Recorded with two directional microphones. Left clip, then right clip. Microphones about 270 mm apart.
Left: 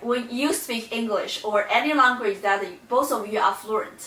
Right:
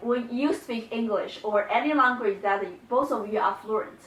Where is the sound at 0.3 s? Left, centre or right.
Centre.